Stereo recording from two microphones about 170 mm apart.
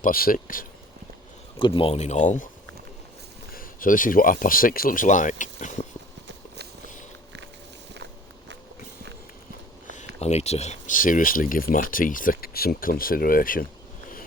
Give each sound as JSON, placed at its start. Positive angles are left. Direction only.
{"t": 0.0, "sound": "speech", "side_deg": 60}
{"t": 1.5, "sound": "speech", "side_deg": 30}
{"t": 3.5, "sound": "speech", "side_deg": 55}
{"t": 10.2, "sound": "speech", "side_deg": 40}